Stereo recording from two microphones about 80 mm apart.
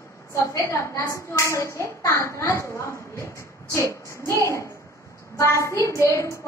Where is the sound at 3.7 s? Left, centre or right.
Left.